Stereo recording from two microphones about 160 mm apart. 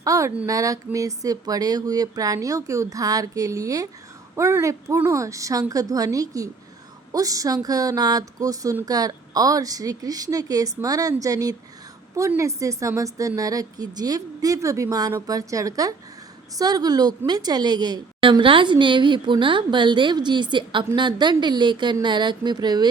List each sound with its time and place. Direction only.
0.0 s a woman's voice: 20° right (ahead or behind)